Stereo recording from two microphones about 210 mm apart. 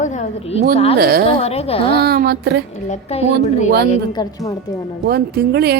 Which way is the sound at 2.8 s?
30° left (ahead or behind).